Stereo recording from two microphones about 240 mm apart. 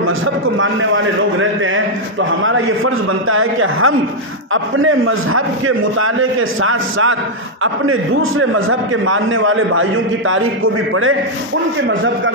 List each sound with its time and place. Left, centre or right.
0.6 s a man's voice: right
6.6 s a man's voice: right